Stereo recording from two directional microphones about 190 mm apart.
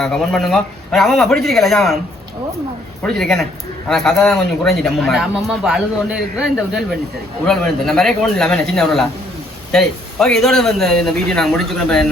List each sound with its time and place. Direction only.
0.0 s a man's voice: centre (ahead or behind)
3.0 s a man's voice: centre (ahead or behind)